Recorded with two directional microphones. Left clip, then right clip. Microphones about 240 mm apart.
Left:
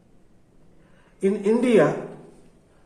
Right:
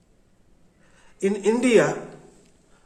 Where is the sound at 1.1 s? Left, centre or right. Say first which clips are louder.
Left 1 dB; right.